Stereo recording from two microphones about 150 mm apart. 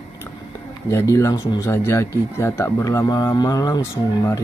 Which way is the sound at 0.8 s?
20° left (ahead or behind).